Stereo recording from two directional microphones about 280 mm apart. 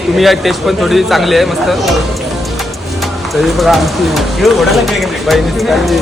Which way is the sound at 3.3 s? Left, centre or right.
Centre.